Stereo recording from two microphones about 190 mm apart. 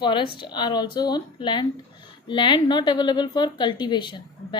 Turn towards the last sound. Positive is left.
turn(degrees=25)  # may be behind; listen again after turning